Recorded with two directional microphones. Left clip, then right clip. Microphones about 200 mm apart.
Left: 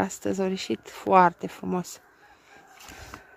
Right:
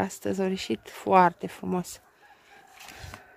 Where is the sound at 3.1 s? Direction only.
35° right (ahead or behind).